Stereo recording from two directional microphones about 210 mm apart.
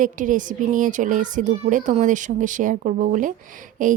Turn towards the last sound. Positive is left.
turn(degrees=-40)  # may be behind; listen again after turning